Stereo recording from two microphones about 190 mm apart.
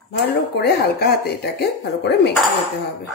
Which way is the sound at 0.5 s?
55° left (ahead or behind).